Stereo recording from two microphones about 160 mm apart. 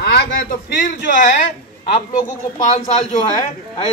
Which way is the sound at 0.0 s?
75° left (ahead or behind).